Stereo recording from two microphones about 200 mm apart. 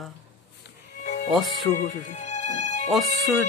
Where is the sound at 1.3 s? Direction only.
Centre (ahead or behind).